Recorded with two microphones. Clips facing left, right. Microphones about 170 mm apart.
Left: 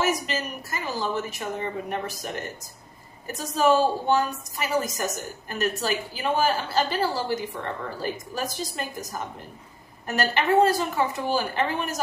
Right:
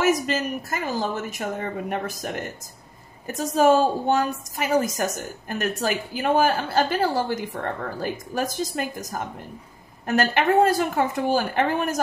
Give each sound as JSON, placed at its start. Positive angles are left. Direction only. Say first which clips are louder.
{"t": 0.3, "sound": "a woman's voice", "louder": "right 5 dB", "side_deg": -50}
{"t": 3.3, "sound": "a woman's voice", "louder": "right 3 dB", "side_deg": -50}